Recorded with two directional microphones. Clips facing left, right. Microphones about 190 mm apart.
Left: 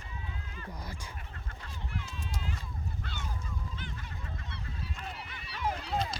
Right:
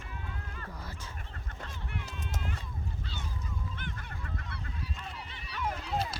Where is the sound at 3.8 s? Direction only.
55° right (ahead or behind).